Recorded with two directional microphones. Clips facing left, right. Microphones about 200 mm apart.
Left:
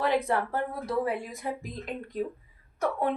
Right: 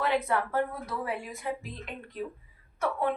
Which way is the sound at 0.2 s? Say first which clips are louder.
Even; 30° left (ahead or behind).